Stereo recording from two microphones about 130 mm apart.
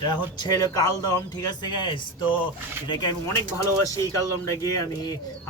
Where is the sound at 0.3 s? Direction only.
30° left (ahead or behind).